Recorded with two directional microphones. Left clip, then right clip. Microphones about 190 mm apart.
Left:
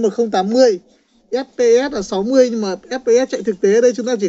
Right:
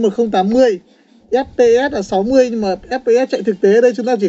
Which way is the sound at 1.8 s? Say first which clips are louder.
Right 4 dB; 5° left (ahead or behind).